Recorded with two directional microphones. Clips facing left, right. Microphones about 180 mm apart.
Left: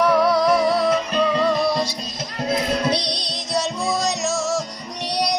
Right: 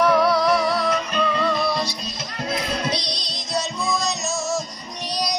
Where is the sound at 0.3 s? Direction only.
20° left (ahead or behind); by 1.9 s 40° left (ahead or behind).